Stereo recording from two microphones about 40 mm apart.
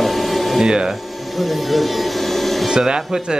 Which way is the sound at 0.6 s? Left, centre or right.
Centre.